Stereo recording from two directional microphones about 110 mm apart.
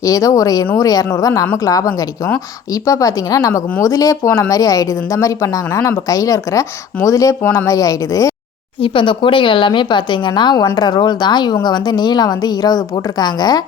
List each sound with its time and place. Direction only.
0.0 s a woman's voice: 30° left (ahead or behind)
8.8 s a woman's voice: 50° left (ahead or behind)